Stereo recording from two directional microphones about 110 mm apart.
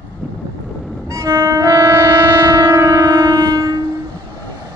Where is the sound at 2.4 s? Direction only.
35° right (ahead or behind).